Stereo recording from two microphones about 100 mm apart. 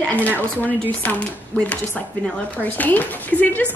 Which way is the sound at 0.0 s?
15° left (ahead or behind).